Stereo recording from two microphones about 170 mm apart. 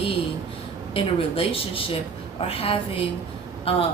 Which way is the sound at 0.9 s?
35° left (ahead or behind).